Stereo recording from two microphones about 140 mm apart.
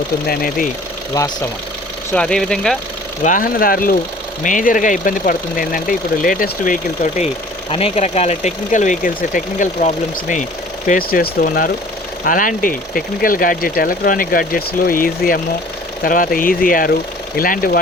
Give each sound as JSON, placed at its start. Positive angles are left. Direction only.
{"t": 0.3, "sound": "speech", "side_deg": 90}
{"t": 2.1, "sound": "speech", "side_deg": 5}
{"t": 3.2, "sound": "speech", "side_deg": 80}
{"t": 4.4, "sound": "speech", "side_deg": 70}
{"t": 7.7, "sound": "speech", "side_deg": 45}
{"t": 10.8, "sound": "speech", "side_deg": 90}